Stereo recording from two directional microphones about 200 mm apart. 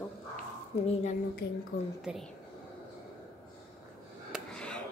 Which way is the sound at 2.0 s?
Centre (ahead or behind).